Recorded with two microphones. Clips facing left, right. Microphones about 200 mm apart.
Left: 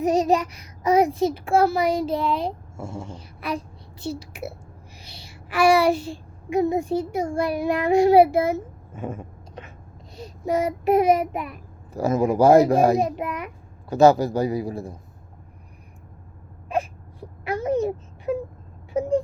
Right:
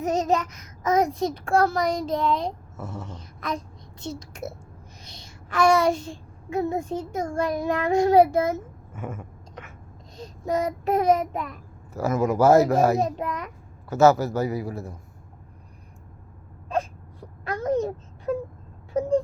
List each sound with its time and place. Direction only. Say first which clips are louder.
0.0 s a sound: left 4 dB; 10° left (ahead or behind)
0.8 s a child's voice: left 3 dB; 10° left (ahead or behind)
3.2 s a sound: left 2 dB; 10° left (ahead or behind)
4.0 s a child's voice: left 3 dB; 10° left (ahead or behind)
9.0 s whispering: left 3 dB; 35° left (ahead or behind)
10.2 s child singing: left 2 dB; 10° left (ahead or behind)
11.9 s a child's voice: left 2 dB; 15° left (ahead or behind)
16.6 s wail: left 1 dB; 10° left (ahead or behind)